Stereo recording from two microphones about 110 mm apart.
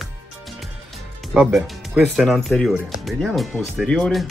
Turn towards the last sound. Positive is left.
turn(degrees=5)  # may be behind; listen again after turning